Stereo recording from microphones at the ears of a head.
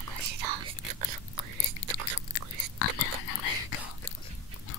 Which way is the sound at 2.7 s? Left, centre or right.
Left.